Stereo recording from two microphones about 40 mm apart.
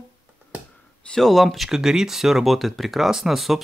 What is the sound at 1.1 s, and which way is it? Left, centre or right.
Speech, centre.